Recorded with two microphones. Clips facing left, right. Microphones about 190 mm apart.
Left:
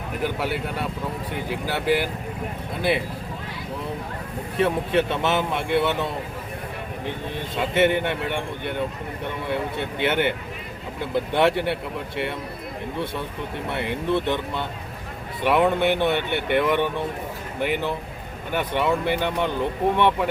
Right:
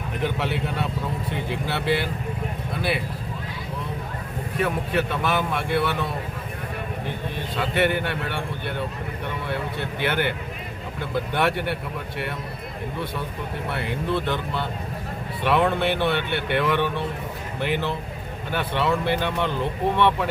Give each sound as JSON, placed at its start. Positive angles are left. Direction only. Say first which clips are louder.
{"t": 0.2, "sound": "speech", "louder": "even", "side_deg": 5}
{"t": 4.5, "sound": "a man's voice", "louder": "left 3 dB", "side_deg": 25}
{"t": 7.5, "sound": "a man's voice", "louder": "left 3 dB", "side_deg": 20}
{"t": 13.7, "sound": "a man's voice", "louder": "left 2 dB", "side_deg": 20}